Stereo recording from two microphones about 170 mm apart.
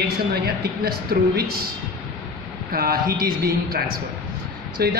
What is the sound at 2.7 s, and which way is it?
Speech, 60° right (ahead or behind).